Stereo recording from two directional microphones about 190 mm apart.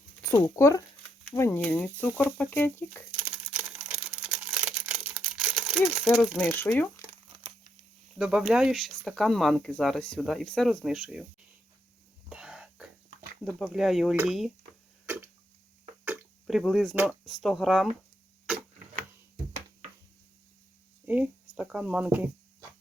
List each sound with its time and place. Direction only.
0.2 s speech: 15° left (ahead or behind)
3.2 s a sound: 5° right (ahead or behind)
6.5 s speech: 10° left (ahead or behind)
8.2 s speech: 5° right (ahead or behind)
12.3 s whispering: 5° right (ahead or behind)
13.4 s speech: centre (ahead or behind)
15.0 s a sound: 10° right (ahead or behind)
16.0 s drip: centre (ahead or behind)
16.9 s speech: 10° right (ahead or behind)
21.1 s speech: 5° right (ahead or behind)